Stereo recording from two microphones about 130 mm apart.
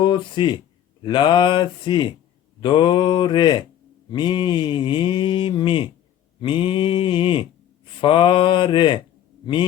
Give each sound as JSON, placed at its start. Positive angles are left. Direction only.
{"t": 0.0, "sound": "mantra", "side_deg": 40}